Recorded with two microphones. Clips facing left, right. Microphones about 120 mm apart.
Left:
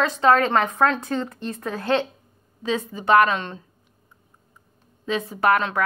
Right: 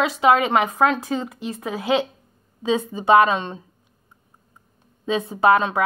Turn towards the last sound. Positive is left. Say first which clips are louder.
# right 3 dB
turn(degrees=-15)  # may be behind; listen again after turning